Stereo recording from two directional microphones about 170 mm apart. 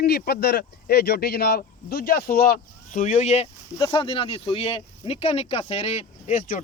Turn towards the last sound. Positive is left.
turn(degrees=50)  # may be behind; listen again after turning